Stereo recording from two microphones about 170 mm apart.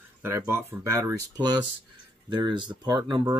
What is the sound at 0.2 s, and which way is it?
Speech, 15° right (ahead or behind).